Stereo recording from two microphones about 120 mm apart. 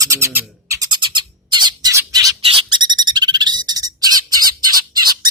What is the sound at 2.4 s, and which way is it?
Bird, 45° right (ahead or behind).